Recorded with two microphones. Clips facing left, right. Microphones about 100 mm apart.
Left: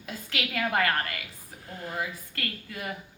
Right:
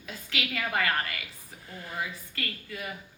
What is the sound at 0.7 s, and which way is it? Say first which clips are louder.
Speech: left 1 dB; 50° left (ahead or behind).